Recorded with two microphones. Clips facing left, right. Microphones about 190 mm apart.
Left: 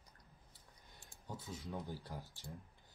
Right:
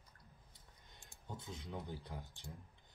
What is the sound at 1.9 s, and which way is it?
Speech, 20° right (ahead or behind).